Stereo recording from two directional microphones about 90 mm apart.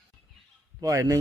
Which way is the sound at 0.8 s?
40° right (ahead or behind).